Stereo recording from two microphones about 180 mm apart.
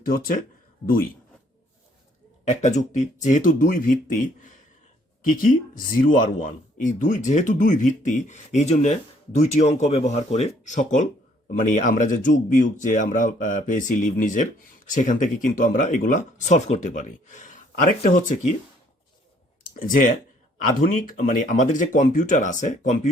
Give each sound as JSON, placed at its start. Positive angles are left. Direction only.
{"t": 0.0, "sound": "speech", "side_deg": 50}
{"t": 2.4, "sound": "speech", "side_deg": 40}
{"t": 19.7, "sound": "speech", "side_deg": 50}